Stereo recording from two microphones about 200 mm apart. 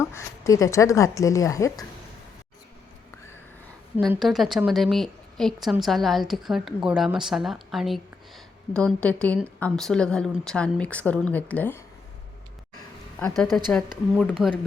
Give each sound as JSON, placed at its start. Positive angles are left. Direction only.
{"t": 0.0, "sound": "a woman's voice", "side_deg": 15}
{"t": 4.1, "sound": "a woman's voice", "side_deg": 0}
{"t": 13.1, "sound": "a woman's voice", "side_deg": 5}